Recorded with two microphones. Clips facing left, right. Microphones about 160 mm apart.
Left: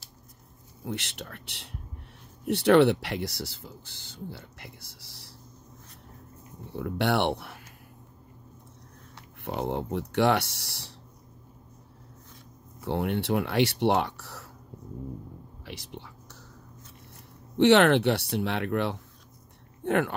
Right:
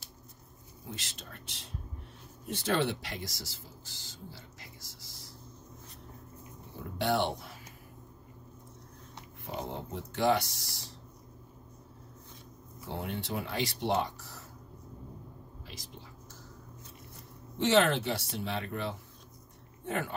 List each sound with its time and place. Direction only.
0.8 s speech: 70° left (ahead or behind)
6.8 s speech: 75° left (ahead or behind)
9.4 s speech: 70° left (ahead or behind)
12.8 s speech: 70° left (ahead or behind)
15.6 s speech: 70° left (ahead or behind)
17.6 s speech: 70° left (ahead or behind)